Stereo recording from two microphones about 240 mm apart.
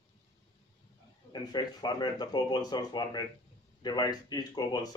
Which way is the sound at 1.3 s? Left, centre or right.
Centre.